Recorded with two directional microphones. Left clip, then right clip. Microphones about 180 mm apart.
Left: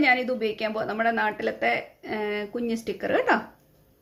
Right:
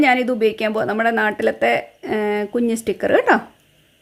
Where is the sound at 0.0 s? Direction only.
65° right (ahead or behind).